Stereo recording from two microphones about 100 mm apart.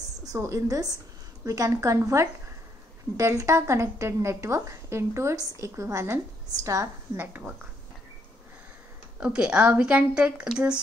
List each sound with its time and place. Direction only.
0.2 s a woman's voice: 35° right (ahead or behind)
9.2 s speech: 10° right (ahead or behind)